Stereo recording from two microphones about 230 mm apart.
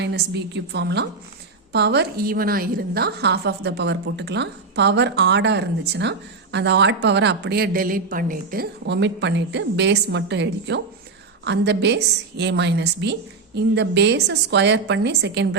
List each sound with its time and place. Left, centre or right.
0.0 s a woman's voice: right